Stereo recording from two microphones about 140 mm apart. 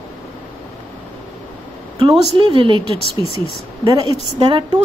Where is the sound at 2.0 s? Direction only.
35° right (ahead or behind).